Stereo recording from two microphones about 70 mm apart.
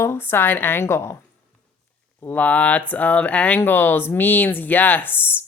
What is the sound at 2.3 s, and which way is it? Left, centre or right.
Speech, centre.